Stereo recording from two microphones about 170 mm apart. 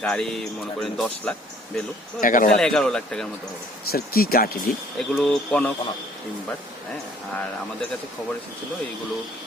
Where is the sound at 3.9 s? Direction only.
60° left (ahead or behind).